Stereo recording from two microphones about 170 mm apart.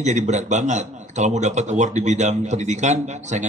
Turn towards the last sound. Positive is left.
turn(degrees=-45)  # may be behind; listen again after turning